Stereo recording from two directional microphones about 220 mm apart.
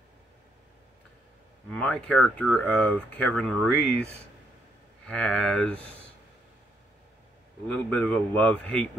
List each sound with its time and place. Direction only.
1.7 s speech: 5° left (ahead or behind)
7.6 s speech: 5° left (ahead or behind)